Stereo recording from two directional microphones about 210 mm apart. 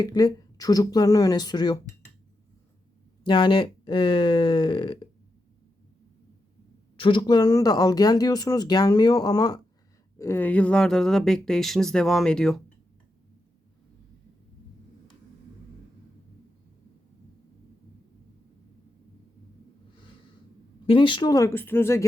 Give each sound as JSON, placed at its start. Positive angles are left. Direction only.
{"t": 0.0, "sound": "speech", "side_deg": 20}
{"t": 3.2, "sound": "speech", "side_deg": 20}
{"t": 6.9, "sound": "speech", "side_deg": 25}
{"t": 20.8, "sound": "speech", "side_deg": 25}